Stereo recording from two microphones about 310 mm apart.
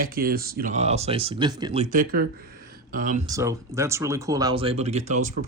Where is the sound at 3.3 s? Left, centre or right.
Centre.